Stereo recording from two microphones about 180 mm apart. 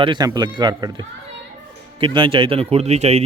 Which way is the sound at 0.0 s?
25° right (ahead or behind).